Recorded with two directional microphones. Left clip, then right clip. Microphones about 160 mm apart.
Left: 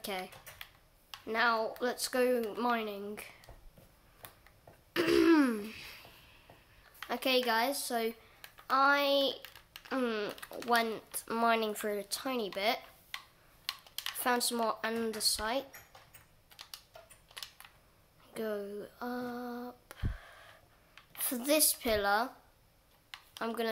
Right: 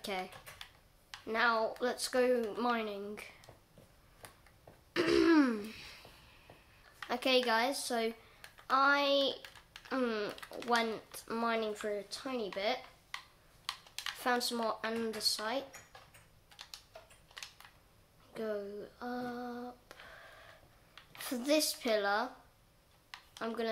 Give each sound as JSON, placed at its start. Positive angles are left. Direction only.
{"t": 0.0, "sound": "computer keyboard", "side_deg": 10}
{"t": 1.1, "sound": "speech", "side_deg": 10}
{"t": 4.9, "sound": "throat clearing", "side_deg": 15}
{"t": 7.1, "sound": "speech", "side_deg": 5}
{"t": 14.2, "sound": "speech", "side_deg": 20}
{"t": 18.3, "sound": "a sound", "side_deg": 25}
{"t": 21.1, "sound": "speech", "side_deg": 25}
{"t": 23.4, "sound": "speech", "side_deg": 25}